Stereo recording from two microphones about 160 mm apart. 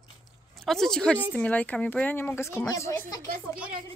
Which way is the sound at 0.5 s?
Centre (ahead or behind).